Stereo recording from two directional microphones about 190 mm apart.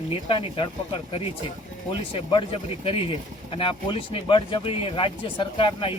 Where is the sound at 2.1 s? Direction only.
30° left (ahead or behind).